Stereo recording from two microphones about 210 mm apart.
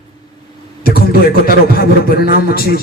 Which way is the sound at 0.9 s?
45° left (ahead or behind).